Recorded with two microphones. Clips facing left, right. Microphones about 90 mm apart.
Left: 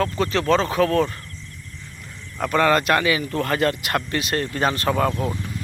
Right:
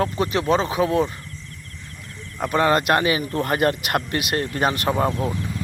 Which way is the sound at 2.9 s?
30° right (ahead or behind).